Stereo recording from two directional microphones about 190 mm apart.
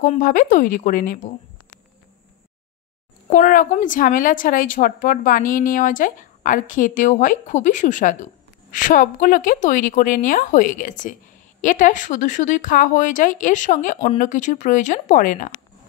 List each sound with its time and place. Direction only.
0.0 s a woman's voice: 40° left (ahead or behind)
3.3 s a woman's voice: 40° left (ahead or behind)